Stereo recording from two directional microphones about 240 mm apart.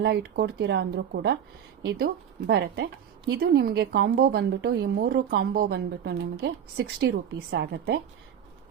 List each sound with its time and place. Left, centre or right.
0.0 s a woman's voice: right